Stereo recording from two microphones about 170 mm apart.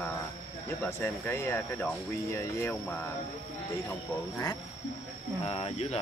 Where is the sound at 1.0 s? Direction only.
15° left (ahead or behind).